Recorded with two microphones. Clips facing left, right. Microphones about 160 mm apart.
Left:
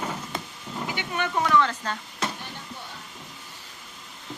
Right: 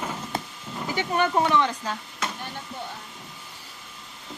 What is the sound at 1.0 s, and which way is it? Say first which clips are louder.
Speech: right 5 dB; 35° right (ahead or behind).